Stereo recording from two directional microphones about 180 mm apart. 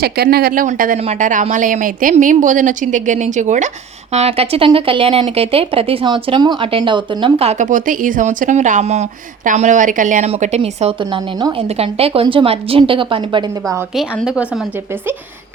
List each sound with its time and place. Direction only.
0.0 s speech: 60° right (ahead or behind); by 10.9 s 35° right (ahead or behind)
11.0 s a woman's voice: 25° right (ahead or behind)
13.9 s a woman's voice: centre (ahead or behind)